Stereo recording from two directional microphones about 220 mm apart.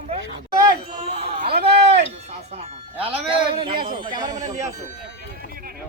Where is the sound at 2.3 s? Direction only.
30° right (ahead or behind).